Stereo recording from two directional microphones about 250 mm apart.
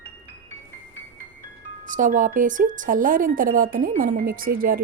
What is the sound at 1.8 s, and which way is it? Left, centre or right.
A woman's voice, right.